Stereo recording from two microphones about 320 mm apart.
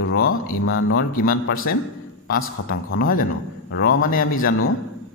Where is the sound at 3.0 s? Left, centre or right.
Left.